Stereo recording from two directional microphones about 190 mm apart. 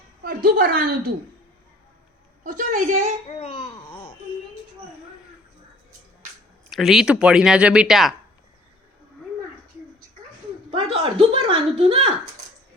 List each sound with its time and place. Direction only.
0.2 s a woman's voice: 50° right (ahead or behind)
2.4 s a woman's voice: 45° right (ahead or behind)
3.2 s speech: 30° left (ahead or behind)
6.7 s speech: centre (ahead or behind)
10.7 s speech: 30° right (ahead or behind)